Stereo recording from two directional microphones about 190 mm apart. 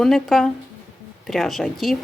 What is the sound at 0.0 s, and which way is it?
Speech, centre (ahead or behind).